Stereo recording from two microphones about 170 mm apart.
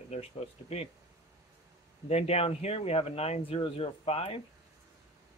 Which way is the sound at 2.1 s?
40° left (ahead or behind).